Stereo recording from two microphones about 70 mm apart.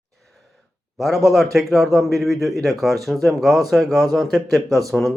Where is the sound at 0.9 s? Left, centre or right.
Centre.